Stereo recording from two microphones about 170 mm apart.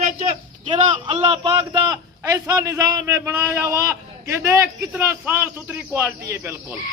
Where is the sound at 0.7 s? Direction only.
35° right (ahead or behind).